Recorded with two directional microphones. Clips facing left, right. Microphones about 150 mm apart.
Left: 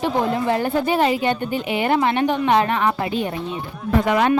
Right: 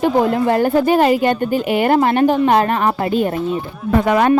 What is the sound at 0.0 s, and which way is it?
A woman's voice, 50° right (ahead or behind).